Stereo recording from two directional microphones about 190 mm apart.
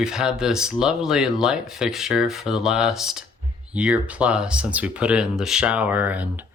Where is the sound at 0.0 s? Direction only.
5° right (ahead or behind).